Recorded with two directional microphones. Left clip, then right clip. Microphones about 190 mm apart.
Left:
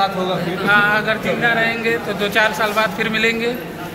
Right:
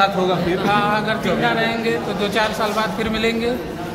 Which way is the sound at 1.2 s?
15° right (ahead or behind).